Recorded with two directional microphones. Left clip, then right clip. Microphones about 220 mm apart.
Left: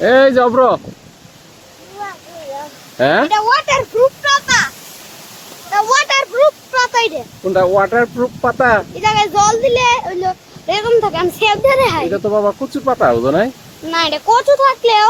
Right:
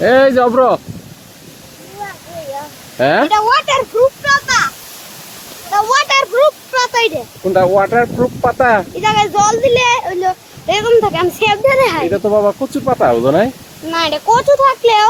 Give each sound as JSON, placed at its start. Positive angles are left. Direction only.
{"t": 0.0, "sound": "speech", "side_deg": -5}
{"t": 3.0, "sound": "speech", "side_deg": -5}
{"t": 3.9, "sound": "a sound", "side_deg": 5}
{"t": 5.7, "sound": "speech", "side_deg": -15}
{"t": 6.1, "sound": "speech", "side_deg": -30}
{"t": 6.7, "sound": "speech", "side_deg": -15}